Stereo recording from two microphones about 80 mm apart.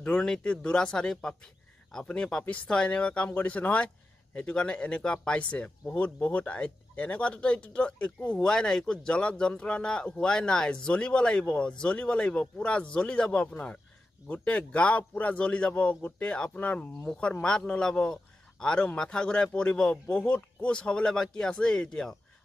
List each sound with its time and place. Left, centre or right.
0.0 s speech: centre